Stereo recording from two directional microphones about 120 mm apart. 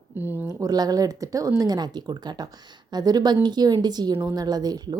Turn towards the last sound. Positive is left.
turn(degrees=-35)  # may be behind; listen again after turning